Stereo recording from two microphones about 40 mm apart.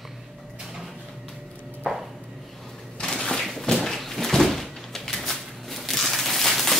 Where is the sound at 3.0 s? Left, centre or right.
Centre.